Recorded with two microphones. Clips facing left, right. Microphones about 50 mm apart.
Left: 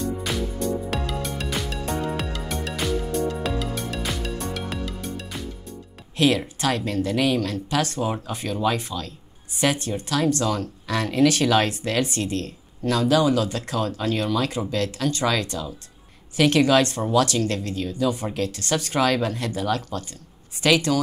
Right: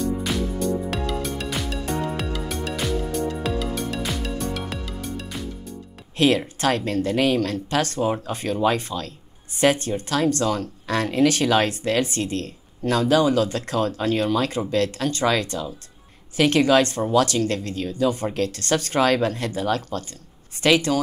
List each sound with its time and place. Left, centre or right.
0.8 s music: centre
6.1 s speech: right